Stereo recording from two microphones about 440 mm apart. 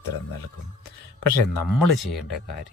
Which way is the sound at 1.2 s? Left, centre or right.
Left.